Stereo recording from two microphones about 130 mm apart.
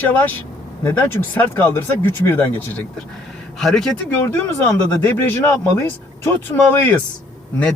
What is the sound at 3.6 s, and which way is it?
Speech, centre (ahead or behind).